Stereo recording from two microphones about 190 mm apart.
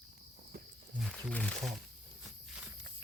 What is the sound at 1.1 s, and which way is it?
Speech, 5° left (ahead or behind).